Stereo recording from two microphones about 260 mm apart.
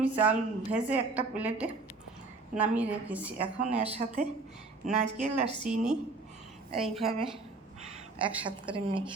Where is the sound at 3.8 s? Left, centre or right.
Right.